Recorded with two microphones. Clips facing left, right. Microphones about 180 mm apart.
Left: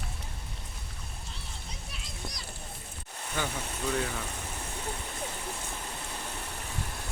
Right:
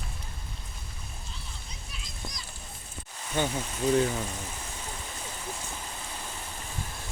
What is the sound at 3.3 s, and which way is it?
Speech, 30° right (ahead or behind).